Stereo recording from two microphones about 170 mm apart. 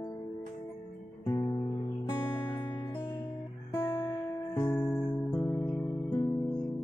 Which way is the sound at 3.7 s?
15° left (ahead or behind).